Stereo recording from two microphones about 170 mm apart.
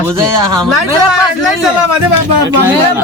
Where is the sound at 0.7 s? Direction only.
Centre (ahead or behind).